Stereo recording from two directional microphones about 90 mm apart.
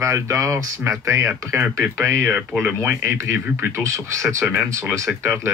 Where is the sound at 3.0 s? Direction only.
25° right (ahead or behind).